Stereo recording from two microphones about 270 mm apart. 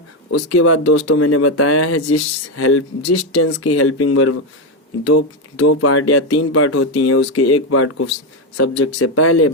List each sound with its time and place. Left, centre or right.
0.5 s speech: left